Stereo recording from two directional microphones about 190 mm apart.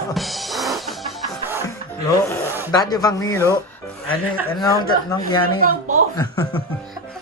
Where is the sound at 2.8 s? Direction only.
20° left (ahead or behind).